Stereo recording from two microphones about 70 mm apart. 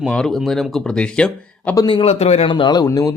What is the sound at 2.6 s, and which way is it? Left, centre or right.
Speech, left.